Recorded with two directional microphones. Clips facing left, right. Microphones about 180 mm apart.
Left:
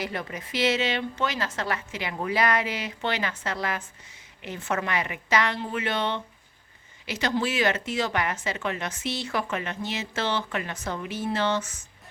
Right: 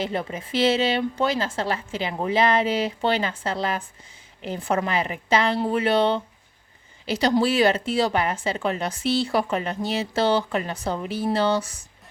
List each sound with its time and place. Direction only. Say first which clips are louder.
0.0 s a woman's voice: right 5 dB; 25° right (ahead or behind)